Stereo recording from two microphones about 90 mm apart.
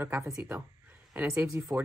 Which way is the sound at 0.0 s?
25° right (ahead or behind).